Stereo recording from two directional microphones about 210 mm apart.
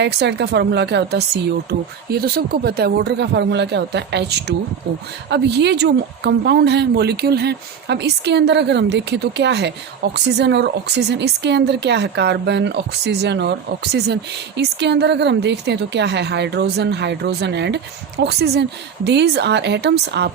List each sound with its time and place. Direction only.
0.0 s a woman's voice: 55° right (ahead or behind)